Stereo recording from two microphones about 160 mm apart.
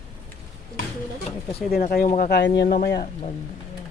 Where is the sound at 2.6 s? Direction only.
70° left (ahead or behind).